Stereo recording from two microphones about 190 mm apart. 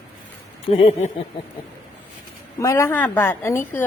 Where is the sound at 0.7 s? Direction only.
30° left (ahead or behind).